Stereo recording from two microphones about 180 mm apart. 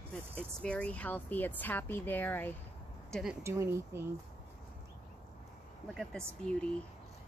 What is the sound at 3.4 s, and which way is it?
Speech, 15° right (ahead or behind).